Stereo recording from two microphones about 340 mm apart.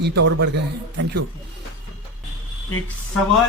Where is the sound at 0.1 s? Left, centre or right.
Right.